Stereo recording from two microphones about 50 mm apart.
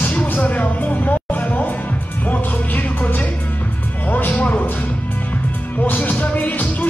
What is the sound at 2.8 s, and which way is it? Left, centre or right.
Music, left.